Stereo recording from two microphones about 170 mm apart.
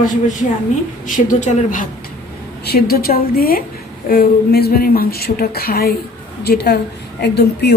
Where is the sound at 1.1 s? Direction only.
50° left (ahead or behind).